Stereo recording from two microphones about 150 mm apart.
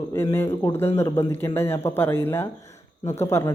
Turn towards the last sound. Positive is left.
turn(degrees=15)  # may be behind; listen again after turning